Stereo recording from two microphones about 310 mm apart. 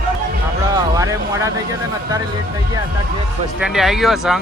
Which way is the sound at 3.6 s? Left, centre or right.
Centre.